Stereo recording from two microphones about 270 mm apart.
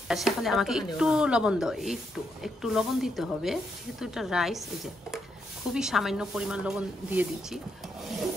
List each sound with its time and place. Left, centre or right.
0.1 s speech: centre
5.7 s speech: centre